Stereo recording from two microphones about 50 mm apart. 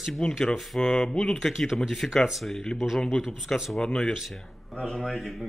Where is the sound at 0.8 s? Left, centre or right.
Centre.